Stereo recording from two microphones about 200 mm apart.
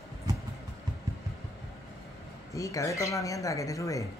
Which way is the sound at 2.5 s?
15° left (ahead or behind).